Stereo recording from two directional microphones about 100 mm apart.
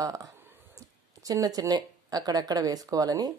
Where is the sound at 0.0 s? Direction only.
35° right (ahead or behind).